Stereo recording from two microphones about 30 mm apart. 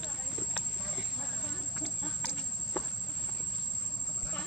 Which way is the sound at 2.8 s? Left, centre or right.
Left.